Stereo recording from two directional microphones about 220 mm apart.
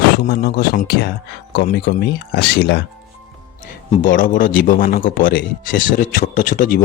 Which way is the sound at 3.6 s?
30° left (ahead or behind).